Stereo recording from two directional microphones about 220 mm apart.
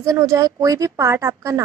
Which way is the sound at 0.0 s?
15° right (ahead or behind).